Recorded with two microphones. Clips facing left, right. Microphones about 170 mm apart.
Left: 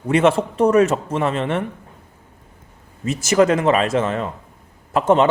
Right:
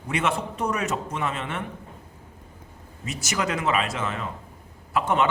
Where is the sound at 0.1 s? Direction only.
35° left (ahead or behind).